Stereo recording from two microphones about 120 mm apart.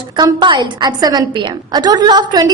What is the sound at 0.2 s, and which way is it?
A woman's voice, 40° right (ahead or behind).